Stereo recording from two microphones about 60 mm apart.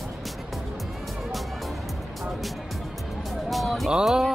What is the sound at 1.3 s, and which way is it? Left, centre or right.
Music, centre.